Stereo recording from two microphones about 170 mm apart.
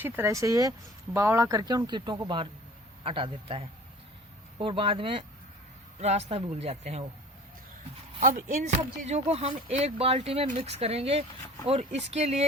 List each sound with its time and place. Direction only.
0.0 s speech: 15° right (ahead or behind); by 7.0 s 40° right (ahead or behind)
8.2 s speech: 50° right (ahead or behind)